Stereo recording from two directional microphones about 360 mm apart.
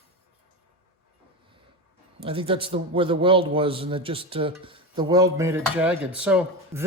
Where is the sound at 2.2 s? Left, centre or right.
Centre.